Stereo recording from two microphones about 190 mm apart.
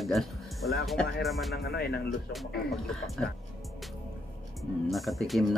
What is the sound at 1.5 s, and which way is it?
Speech, 55° left (ahead or behind).